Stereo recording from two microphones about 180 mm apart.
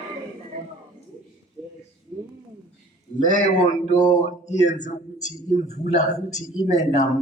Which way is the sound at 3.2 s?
45° left (ahead or behind).